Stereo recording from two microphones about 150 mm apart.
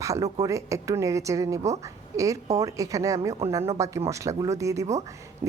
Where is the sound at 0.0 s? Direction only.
20° right (ahead or behind).